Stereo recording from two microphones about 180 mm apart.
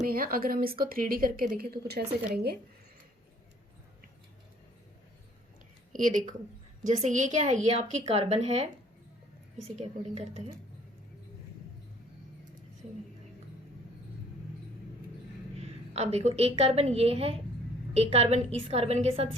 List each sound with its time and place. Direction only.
0.0 s speech: 50° right (ahead or behind)
5.9 s a woman's voice: 50° right (ahead or behind)
9.7 s a woman's voice: 35° right (ahead or behind)
15.9 s a woman's voice: 35° right (ahead or behind)